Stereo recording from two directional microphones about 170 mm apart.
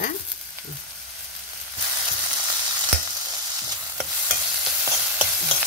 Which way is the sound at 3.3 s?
25° right (ahead or behind).